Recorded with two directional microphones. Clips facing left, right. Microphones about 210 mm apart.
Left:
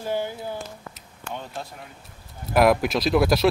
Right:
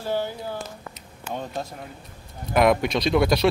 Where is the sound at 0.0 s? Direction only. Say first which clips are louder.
Even; 15° left (ahead or behind).